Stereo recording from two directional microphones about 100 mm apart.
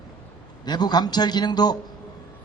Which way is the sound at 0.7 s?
45° left (ahead or behind).